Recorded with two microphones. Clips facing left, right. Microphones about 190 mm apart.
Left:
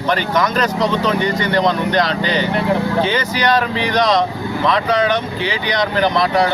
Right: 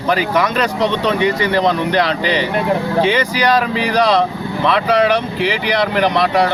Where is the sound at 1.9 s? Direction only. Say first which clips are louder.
Right 1 dB; 10° right (ahead or behind).